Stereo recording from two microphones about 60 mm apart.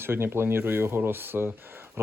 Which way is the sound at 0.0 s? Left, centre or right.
Right.